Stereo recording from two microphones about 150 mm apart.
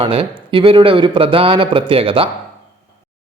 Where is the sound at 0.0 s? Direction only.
35° right (ahead or behind).